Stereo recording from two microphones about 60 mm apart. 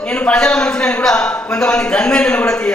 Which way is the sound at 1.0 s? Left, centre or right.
Centre.